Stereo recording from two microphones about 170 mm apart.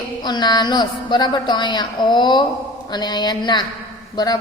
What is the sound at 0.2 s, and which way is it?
A woman's voice, 25° left (ahead or behind).